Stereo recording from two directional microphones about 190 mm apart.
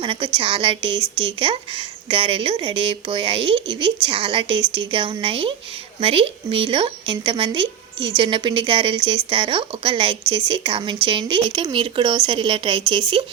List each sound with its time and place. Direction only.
0.0 s speech: 25° right (ahead or behind)